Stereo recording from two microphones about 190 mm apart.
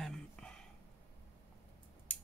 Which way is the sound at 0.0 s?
5° left (ahead or behind).